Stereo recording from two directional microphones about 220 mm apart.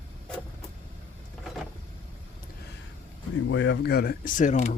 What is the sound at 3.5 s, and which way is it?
Speech, 55° left (ahead or behind).